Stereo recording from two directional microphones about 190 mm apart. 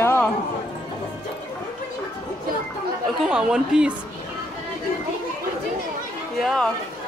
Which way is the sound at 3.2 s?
5° right (ahead or behind).